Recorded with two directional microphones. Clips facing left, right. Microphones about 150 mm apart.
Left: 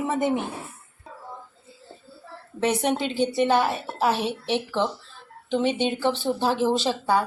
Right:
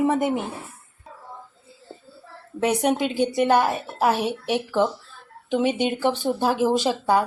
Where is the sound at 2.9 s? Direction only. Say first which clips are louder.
Right 2 dB; 10° right (ahead or behind).